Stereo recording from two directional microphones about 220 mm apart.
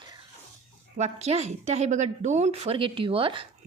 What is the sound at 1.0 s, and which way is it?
Speech, 30° right (ahead or behind).